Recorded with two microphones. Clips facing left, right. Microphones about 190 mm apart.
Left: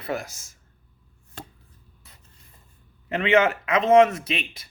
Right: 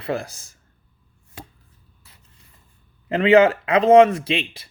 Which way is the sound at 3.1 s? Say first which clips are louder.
Right 6 dB; 35° right (ahead or behind).